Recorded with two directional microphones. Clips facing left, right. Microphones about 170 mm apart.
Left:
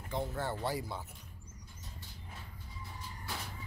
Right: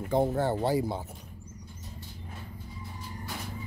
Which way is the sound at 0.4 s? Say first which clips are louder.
Right 9 dB; 30° right (ahead or behind).